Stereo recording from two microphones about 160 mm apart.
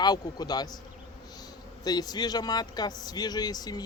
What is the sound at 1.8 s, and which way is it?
Speech, 25° left (ahead or behind).